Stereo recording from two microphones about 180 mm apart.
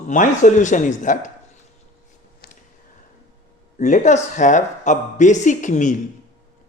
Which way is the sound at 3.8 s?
45° left (ahead or behind).